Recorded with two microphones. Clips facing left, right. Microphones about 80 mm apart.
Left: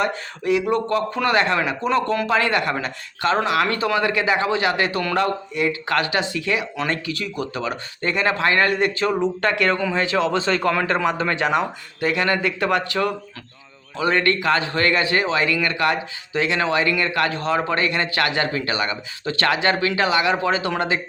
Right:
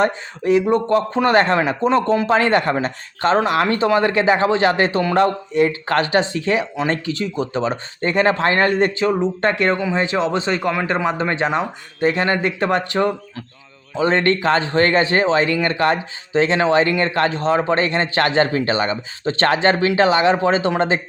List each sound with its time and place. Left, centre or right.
0.0 s a man's voice: right